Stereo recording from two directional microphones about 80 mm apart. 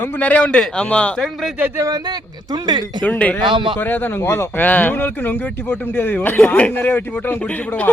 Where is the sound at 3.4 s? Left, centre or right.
Right.